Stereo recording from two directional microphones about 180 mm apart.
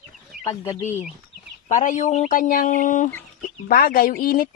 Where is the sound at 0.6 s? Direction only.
15° left (ahead or behind).